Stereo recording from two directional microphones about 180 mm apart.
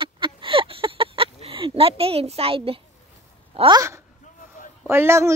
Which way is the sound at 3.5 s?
25° right (ahead or behind).